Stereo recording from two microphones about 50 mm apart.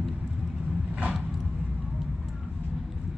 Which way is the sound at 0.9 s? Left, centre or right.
Right.